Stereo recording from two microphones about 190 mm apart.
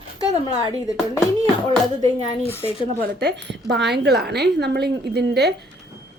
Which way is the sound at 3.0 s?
60° right (ahead or behind).